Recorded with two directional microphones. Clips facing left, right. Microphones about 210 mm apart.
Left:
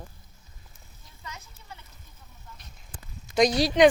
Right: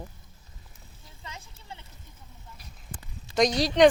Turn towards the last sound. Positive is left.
turn(degrees=5)  # may be behind; listen again after turning